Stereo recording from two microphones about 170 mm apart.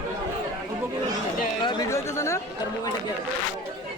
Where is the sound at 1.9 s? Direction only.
15° left (ahead or behind).